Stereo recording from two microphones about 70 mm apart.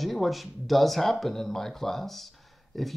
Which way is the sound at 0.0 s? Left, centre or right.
Centre.